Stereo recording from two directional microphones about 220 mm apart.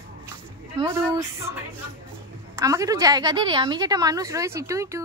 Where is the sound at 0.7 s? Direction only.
15° right (ahead or behind).